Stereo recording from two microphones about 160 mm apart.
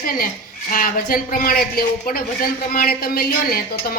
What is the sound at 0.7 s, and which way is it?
A woman's voice, 60° left (ahead or behind).